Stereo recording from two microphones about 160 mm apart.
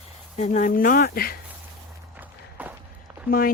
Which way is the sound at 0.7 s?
60° left (ahead or behind).